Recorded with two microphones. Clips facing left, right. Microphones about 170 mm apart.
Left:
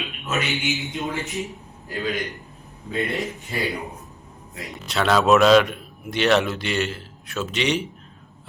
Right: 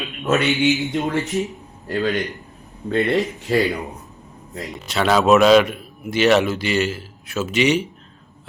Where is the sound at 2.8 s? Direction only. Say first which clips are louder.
Right 7 dB; 70° right (ahead or behind).